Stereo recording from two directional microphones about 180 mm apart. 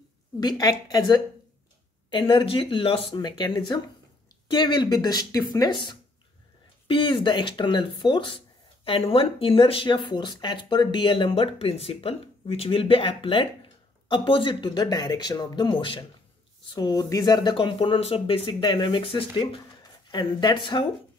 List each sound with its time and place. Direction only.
0.4 s speech: 20° left (ahead or behind)